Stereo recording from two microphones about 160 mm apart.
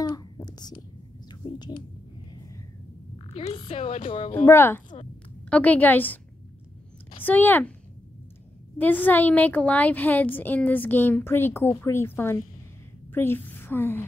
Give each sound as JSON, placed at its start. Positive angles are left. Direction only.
{"t": 0.0, "sound": "whispering", "side_deg": 25}
{"t": 1.3, "sound": "a sound", "side_deg": 25}
{"t": 3.3, "sound": "a woman's voice", "side_deg": 35}
{"t": 4.5, "sound": "a woman's voice", "side_deg": 15}
{"t": 7.2, "sound": "a woman's voice", "side_deg": 10}
{"t": 8.7, "sound": "a woman's voice", "side_deg": 10}